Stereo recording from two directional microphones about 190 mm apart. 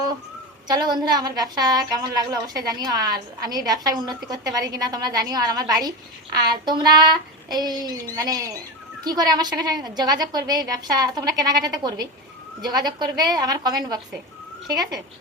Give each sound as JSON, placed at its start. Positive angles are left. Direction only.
{"t": 0.7, "sound": "a woman's voice", "side_deg": -20}